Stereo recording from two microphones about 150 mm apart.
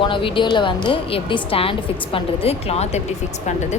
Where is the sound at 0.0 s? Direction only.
35° left (ahead or behind).